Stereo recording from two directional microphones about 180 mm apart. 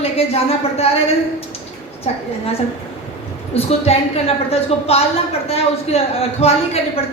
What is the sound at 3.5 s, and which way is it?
A woman's voice, 35° left (ahead or behind).